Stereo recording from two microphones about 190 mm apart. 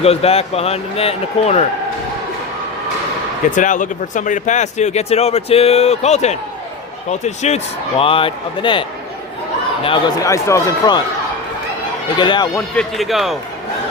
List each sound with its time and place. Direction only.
0.0 s speech: 30° left (ahead or behind)
3.5 s speech: 40° left (ahead or behind); by 8.8 s 25° left (ahead or behind)
10.2 s speech: 15° left (ahead or behind)
12.1 s speech: 25° left (ahead or behind)
12.7 s speech: centre (ahead or behind)